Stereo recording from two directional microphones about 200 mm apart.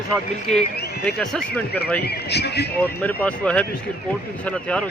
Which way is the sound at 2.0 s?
55° left (ahead or behind).